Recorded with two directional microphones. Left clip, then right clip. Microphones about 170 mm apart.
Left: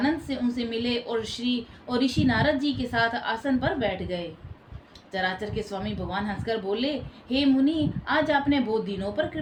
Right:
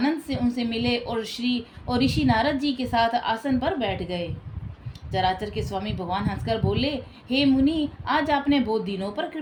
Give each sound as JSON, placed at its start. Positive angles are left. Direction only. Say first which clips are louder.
{"t": 0.0, "sound": "a woman's voice", "louder": "right 1 dB", "side_deg": -40}